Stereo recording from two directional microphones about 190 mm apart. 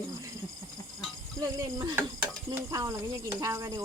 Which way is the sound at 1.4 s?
20° right (ahead or behind).